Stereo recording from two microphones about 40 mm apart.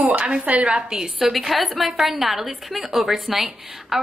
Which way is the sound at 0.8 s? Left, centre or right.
Centre.